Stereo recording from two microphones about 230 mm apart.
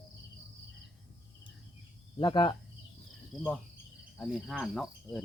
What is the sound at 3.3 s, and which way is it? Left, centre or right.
Cricket, centre.